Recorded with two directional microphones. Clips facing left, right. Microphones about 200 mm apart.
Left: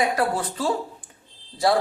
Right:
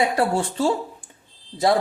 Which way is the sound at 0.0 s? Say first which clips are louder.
Right 2 dB; 25° right (ahead or behind).